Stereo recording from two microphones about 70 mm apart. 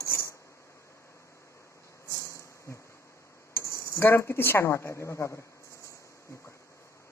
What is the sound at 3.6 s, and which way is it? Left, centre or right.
Speech, left.